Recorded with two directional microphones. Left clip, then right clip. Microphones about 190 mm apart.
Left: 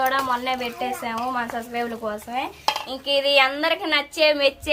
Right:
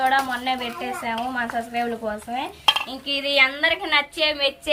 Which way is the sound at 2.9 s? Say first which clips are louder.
Left 4 dB; 60° left (ahead or behind).